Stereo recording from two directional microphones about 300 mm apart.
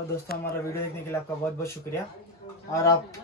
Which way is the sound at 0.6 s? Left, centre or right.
Centre.